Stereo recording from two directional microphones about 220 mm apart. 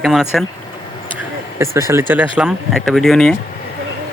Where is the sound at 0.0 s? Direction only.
Centre (ahead or behind).